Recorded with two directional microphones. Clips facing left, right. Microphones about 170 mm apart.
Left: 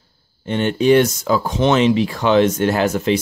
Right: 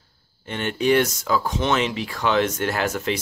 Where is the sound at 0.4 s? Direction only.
25° left (ahead or behind).